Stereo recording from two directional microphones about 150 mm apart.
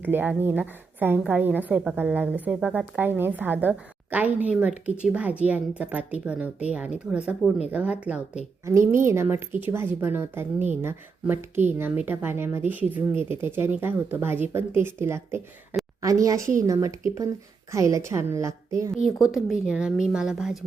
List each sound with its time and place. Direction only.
0.0 s a woman's voice: 10° right (ahead or behind)
19.0 s a woman's voice: centre (ahead or behind)